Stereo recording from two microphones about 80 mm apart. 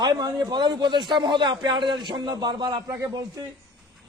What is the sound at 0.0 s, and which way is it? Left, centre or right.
A man's voice, right.